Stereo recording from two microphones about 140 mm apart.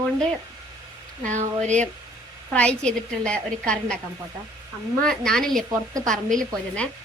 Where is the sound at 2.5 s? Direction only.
5° left (ahead or behind).